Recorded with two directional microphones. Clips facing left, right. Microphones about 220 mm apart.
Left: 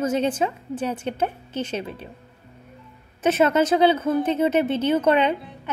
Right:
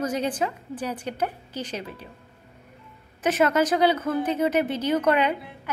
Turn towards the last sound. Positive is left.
turn(degrees=25)  # may be behind; listen again after turning